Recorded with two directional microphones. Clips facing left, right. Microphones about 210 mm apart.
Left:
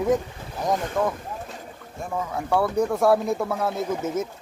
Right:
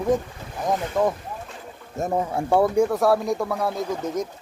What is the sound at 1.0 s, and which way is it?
Speech, 10° right (ahead or behind).